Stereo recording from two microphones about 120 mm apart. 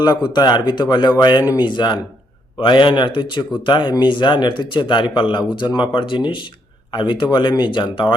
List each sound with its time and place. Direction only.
0.0 s speech: 35° left (ahead or behind)